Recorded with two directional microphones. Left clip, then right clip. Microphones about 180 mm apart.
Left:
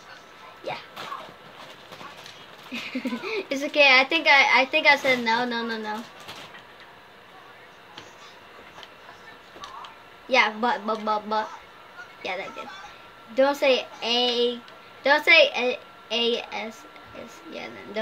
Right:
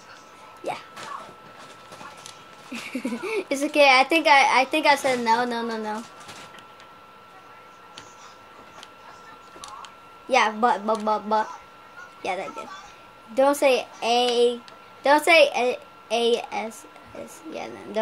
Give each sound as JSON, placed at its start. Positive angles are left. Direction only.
{"t": 2.7, "sound": "a child's voice", "side_deg": -55}
{"t": 10.3, "sound": "a child's voice", "side_deg": -55}